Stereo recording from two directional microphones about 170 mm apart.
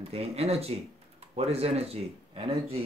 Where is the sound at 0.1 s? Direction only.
35° right (ahead or behind).